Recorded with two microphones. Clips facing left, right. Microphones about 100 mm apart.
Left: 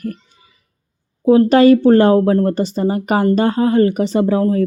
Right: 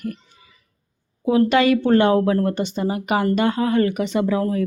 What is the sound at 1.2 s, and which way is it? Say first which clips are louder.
Speech: left 7 dB; 35° left (ahead or behind).